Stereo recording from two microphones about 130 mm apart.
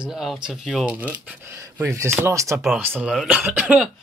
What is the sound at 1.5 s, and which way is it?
Speech, 20° right (ahead or behind).